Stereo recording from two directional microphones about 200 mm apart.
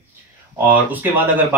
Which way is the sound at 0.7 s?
10° right (ahead or behind).